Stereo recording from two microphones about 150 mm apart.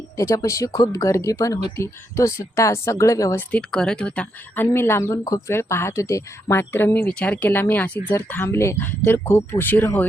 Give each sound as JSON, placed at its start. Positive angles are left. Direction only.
{"t": 0.2, "sound": "speech", "side_deg": 20}
{"t": 3.5, "sound": "speech", "side_deg": 5}